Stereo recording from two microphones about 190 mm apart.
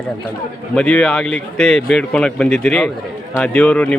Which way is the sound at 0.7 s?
5° left (ahead or behind).